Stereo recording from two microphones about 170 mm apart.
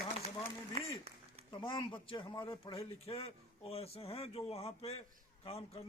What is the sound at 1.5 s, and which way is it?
Speech, 30° left (ahead or behind).